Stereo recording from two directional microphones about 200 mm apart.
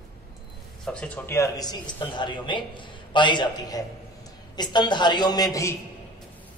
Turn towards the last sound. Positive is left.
turn(degrees=15)  # may be behind; listen again after turning